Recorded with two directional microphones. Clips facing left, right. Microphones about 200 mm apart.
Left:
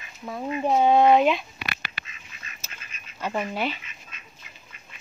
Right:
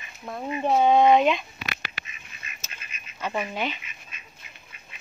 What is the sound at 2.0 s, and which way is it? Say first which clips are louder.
Duck: even; 90° right.